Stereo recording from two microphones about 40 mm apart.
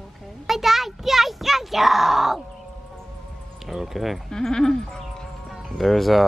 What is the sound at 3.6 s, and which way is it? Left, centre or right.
Speech, centre.